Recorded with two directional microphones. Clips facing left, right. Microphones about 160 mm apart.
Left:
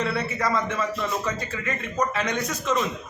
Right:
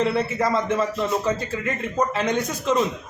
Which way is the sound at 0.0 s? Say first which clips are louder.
Right 4 dB; 25° right (ahead or behind).